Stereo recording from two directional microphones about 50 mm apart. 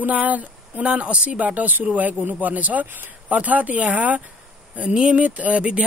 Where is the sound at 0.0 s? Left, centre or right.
Right.